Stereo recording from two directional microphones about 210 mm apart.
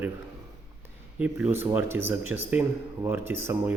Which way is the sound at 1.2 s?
5° right (ahead or behind).